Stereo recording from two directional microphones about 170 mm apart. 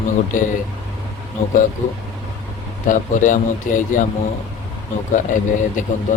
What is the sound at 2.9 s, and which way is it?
Speech, 50° left (ahead or behind).